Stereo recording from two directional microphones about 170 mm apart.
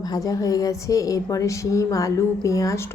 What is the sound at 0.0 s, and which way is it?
A woman's voice, 20° left (ahead or behind).